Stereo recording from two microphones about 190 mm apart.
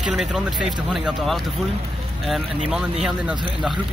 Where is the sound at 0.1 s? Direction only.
Centre (ahead or behind).